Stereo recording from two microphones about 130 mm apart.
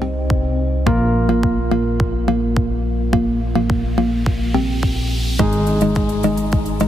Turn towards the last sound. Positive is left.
turn(degrees=0)  # may be behind; listen again after turning